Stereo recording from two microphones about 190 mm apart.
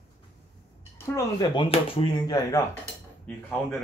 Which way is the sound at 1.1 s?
25° left (ahead or behind).